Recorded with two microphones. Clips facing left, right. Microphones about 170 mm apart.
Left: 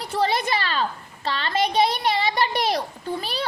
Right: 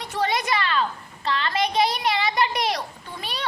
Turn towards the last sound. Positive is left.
turn(degrees=35)  # may be behind; listen again after turning